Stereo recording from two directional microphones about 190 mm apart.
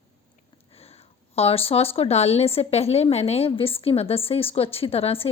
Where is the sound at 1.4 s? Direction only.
30° left (ahead or behind).